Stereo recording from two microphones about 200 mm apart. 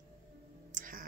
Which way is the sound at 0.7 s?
45° right (ahead or behind).